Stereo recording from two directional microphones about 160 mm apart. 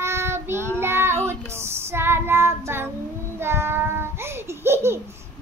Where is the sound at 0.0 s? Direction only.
15° right (ahead or behind).